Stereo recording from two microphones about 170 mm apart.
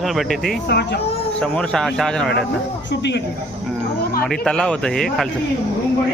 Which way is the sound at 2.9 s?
90° left.